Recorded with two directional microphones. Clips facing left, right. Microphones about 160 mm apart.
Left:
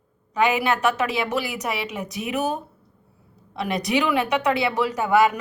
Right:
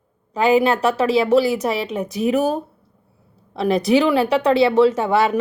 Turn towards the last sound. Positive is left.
turn(degrees=-30)  # may be behind; listen again after turning